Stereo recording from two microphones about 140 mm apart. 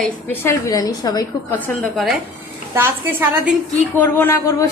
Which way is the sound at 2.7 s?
15° right (ahead or behind).